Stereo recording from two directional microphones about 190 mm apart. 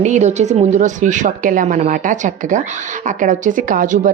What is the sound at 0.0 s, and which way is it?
A woman's voice, 40° right (ahead or behind).